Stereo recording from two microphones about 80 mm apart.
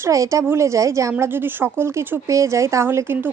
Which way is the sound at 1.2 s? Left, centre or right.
Right.